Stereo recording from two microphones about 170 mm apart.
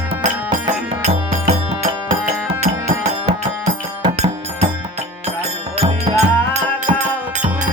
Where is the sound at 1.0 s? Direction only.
45° right (ahead or behind).